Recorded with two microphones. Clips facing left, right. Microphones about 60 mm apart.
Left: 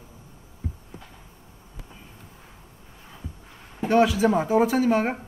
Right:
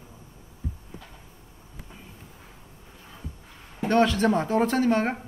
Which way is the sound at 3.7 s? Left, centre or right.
Centre.